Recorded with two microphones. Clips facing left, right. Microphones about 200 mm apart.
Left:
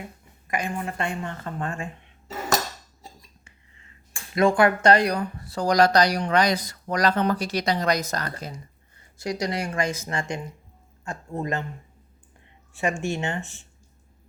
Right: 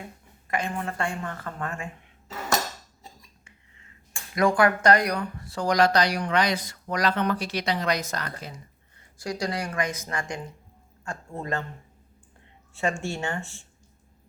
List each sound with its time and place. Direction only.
0.4 s speech: 15° left (ahead or behind)
3.0 s cutlery: 35° left (ahead or behind)
4.4 s speech: 25° left (ahead or behind); by 8.5 s 40° left (ahead or behind)
9.1 s speech: 20° left (ahead or behind)
12.7 s speech: 15° left (ahead or behind)